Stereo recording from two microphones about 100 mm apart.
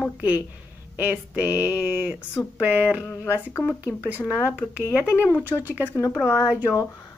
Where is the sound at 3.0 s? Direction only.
25° left (ahead or behind).